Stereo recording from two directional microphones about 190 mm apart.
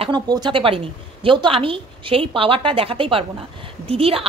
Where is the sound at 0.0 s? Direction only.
20° right (ahead or behind).